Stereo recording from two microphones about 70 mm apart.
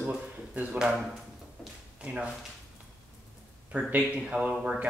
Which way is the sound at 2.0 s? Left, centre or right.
Centre.